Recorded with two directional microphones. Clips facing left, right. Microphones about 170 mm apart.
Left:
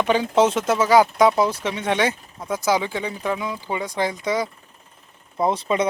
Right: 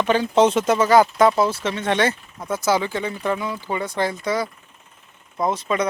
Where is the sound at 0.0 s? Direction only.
10° left (ahead or behind).